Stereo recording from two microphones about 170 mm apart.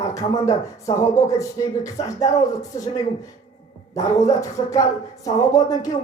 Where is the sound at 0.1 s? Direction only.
20° left (ahead or behind).